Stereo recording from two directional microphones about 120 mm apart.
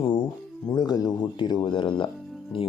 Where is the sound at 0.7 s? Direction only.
35° left (ahead or behind).